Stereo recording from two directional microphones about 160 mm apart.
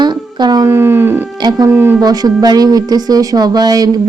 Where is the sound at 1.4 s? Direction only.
25° right (ahead or behind).